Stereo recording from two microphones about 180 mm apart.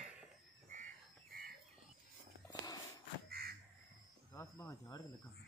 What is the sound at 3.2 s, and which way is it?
Crow, 60° right (ahead or behind).